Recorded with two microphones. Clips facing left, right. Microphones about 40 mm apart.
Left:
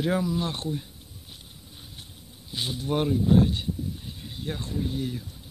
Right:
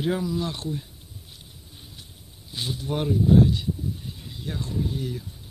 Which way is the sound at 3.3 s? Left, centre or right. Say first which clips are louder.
Right 4 dB; left.